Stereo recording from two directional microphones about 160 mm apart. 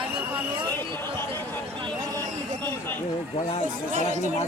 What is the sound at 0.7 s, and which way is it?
Chatter, 15° left (ahead or behind).